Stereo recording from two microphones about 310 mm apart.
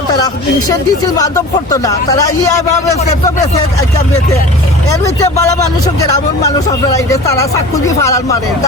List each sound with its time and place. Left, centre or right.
0.7 s speech: centre
3.8 s speech: centre
5.4 s speech: centre